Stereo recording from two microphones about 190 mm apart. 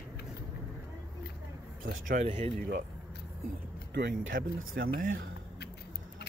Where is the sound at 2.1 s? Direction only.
30° right (ahead or behind).